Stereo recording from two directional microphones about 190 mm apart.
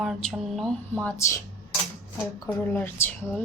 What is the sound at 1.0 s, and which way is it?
A woman's voice, 15° left (ahead or behind).